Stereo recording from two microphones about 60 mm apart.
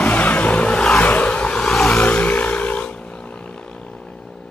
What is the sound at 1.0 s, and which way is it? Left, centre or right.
Vehicle, left.